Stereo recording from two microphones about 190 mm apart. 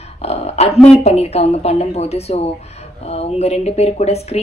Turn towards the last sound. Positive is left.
turn(degrees=35)  # may be behind; listen again after turning